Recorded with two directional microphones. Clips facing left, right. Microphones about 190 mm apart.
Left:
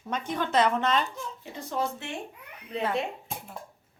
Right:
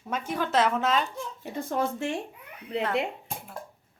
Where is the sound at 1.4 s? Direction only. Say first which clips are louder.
Right 3 dB; 50° right (ahead or behind).